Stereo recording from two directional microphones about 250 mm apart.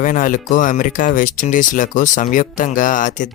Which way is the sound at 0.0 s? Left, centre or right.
Left.